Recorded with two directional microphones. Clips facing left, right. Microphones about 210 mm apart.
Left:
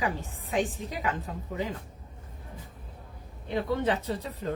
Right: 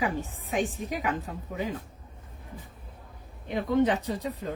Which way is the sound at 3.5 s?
15° right (ahead or behind).